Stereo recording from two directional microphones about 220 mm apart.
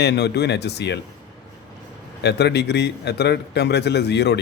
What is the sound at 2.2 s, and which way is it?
Speech, 50° left (ahead or behind).